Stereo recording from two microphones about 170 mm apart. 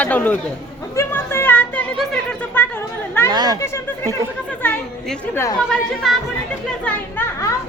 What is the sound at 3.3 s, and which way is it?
Speech, 25° right (ahead or behind).